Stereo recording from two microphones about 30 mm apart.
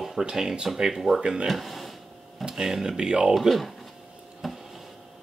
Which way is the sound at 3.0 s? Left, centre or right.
Right.